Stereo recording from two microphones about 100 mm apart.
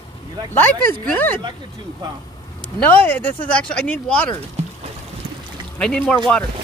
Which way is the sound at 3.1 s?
15° left (ahead or behind).